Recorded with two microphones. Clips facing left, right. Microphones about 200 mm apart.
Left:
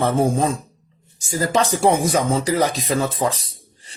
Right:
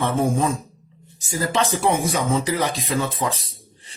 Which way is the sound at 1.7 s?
40° left (ahead or behind).